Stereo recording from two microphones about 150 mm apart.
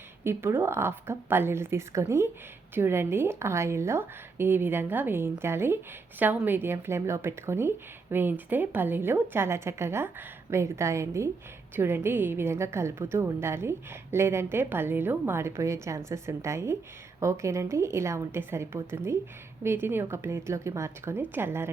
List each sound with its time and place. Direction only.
0.3 s a woman's voice: 15° right (ahead or behind)